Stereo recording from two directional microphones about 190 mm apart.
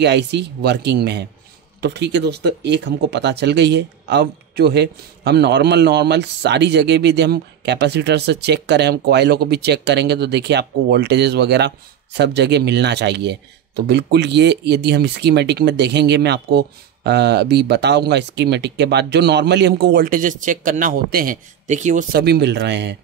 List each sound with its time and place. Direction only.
0.0 s speech: 65° right (ahead or behind); by 22.2 s 40° right (ahead or behind)
22.2 s speech: 60° right (ahead or behind)